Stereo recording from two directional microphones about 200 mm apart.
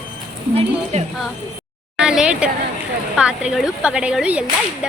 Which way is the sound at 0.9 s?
35° right (ahead or behind).